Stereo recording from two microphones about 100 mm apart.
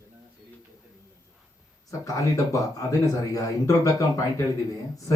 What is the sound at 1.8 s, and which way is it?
Speech, 35° left (ahead or behind).